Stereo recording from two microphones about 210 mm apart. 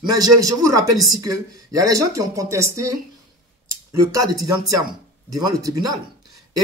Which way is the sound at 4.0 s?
15° right (ahead or behind).